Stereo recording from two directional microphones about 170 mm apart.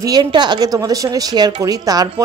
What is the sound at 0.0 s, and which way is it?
Speech, 25° right (ahead or behind).